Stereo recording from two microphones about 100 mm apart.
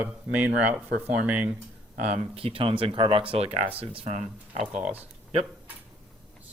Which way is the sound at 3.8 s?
65° right (ahead or behind).